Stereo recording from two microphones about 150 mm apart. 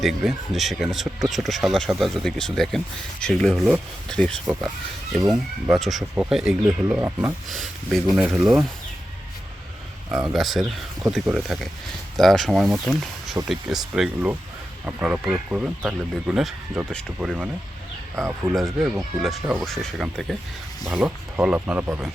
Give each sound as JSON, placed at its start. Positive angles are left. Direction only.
{"t": 0.0, "sound": "speech", "side_deg": 0}
{"t": 6.8, "sound": "speech", "side_deg": -15}
{"t": 7.5, "sound": "speech", "side_deg": 0}
{"t": 10.3, "sound": "speech", "side_deg": 0}